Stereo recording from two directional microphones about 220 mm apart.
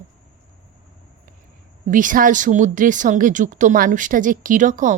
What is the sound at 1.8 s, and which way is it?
A woman's voice, 35° right (ahead or behind).